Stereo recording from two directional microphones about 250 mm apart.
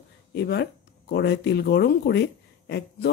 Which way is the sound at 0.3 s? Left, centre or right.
Left.